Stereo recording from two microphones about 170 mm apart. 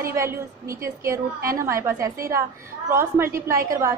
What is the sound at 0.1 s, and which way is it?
A woman's voice, 15° right (ahead or behind).